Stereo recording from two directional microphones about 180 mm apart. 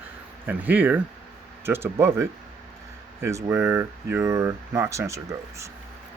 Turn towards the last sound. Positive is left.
turn(degrees=-15)  # may be behind; listen again after turning